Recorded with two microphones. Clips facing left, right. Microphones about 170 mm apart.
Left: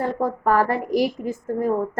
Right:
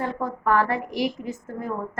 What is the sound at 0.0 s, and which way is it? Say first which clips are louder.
A woman's voice: left 4 dB; 35° left (ahead or behind).